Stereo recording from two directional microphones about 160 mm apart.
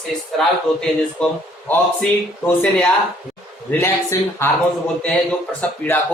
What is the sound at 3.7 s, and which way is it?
Speech, 15° left (ahead or behind).